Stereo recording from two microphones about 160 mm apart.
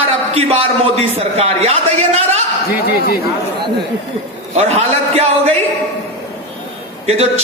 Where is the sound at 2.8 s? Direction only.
70° left (ahead or behind).